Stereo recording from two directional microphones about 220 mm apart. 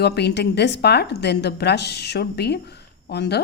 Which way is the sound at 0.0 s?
50° left (ahead or behind).